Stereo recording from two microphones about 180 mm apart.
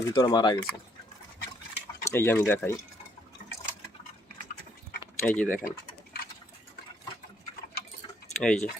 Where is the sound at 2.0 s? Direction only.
15° left (ahead or behind).